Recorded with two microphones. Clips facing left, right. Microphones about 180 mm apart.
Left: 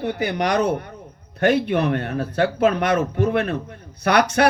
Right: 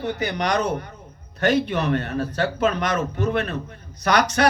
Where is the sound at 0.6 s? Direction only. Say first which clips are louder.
Left 4 dB; 55° left (ahead or behind).